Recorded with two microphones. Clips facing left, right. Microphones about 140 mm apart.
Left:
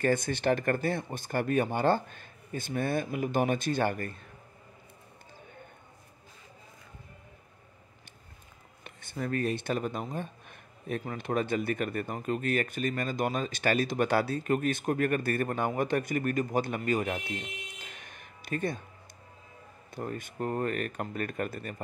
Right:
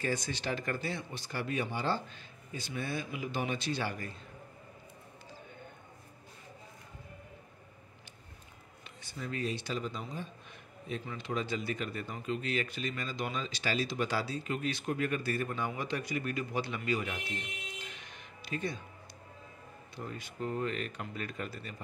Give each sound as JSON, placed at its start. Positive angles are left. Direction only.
{"t": 0.0, "sound": "speech", "side_deg": 55}
{"t": 8.8, "sound": "speech", "side_deg": 55}
{"t": 20.0, "sound": "speech", "side_deg": 50}